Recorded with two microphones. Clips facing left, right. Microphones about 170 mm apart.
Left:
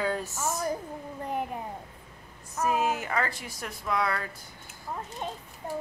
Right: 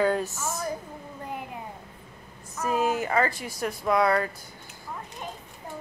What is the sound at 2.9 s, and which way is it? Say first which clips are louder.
A woman's voice: right 5 dB; 35° right (ahead or behind).